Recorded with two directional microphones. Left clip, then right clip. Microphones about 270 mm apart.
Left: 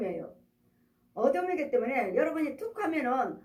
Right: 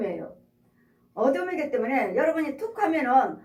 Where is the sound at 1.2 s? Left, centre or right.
Left.